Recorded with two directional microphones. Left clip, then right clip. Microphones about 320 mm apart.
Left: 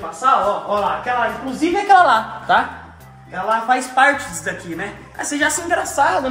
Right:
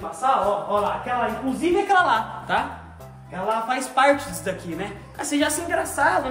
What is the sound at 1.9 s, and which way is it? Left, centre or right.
Speech, centre.